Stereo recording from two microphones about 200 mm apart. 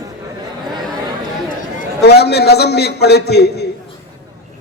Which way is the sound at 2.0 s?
55° left (ahead or behind).